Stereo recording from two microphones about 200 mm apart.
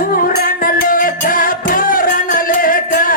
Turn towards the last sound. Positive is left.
turn(degrees=45)  # may be behind; listen again after turning